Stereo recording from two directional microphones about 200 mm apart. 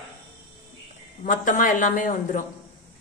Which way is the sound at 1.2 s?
40° left (ahead or behind).